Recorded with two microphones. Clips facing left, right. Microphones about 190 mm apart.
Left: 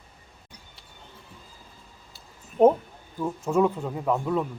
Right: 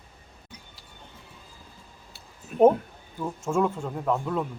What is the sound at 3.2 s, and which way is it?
Speech, 5° left (ahead or behind).